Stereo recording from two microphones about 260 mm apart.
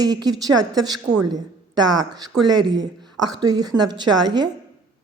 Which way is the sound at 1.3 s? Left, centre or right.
Centre.